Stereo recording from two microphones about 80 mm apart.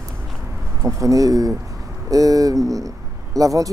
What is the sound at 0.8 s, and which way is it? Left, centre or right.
Speech, right.